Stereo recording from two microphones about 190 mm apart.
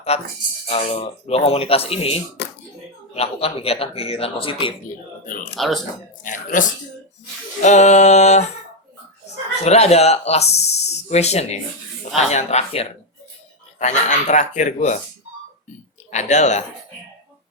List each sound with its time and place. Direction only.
0.1 s speech: 35° left (ahead or behind)
5.5 s speech: centre (ahead or behind)
6.2 s speech: 45° left (ahead or behind)
9.6 s speech: 35° left (ahead or behind)
16.1 s speech: 40° left (ahead or behind)